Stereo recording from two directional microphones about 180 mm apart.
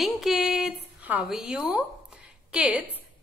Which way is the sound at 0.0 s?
Centre (ahead or behind).